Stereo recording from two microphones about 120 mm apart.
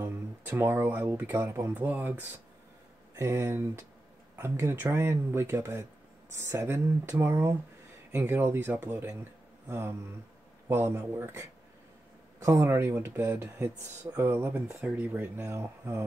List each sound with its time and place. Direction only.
0.0 s speech: 20° right (ahead or behind)